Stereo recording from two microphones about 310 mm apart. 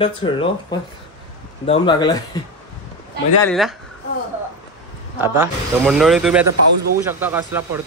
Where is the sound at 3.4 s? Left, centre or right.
Centre.